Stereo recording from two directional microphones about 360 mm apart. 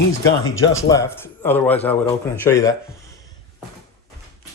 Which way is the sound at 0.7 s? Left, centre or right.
Centre.